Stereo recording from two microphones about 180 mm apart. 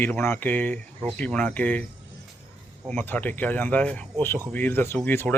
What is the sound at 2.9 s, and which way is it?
Speech, 10° left (ahead or behind).